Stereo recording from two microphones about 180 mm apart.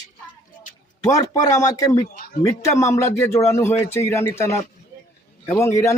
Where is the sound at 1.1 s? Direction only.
20° left (ahead or behind).